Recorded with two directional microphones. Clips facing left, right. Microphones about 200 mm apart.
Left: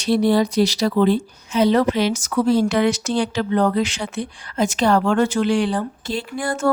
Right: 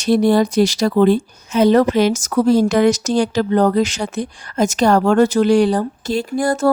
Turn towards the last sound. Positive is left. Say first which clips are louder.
# right 5 dB
turn(degrees=-40)  # may be behind; listen again after turning